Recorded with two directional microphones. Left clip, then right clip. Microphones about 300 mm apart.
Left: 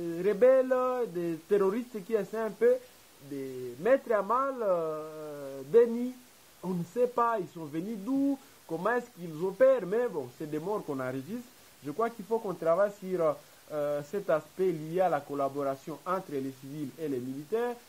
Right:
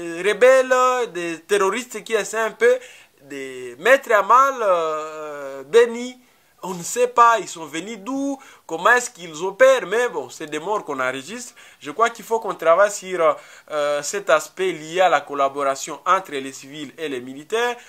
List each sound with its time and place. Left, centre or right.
0.1 s speech: centre
3.8 s speech: centre
7.0 s speech: centre
9.3 s speech: right
9.6 s speech: centre